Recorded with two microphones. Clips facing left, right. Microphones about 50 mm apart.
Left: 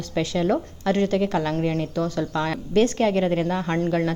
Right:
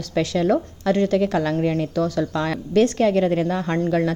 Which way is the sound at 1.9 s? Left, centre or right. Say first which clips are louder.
Right 3 dB; left.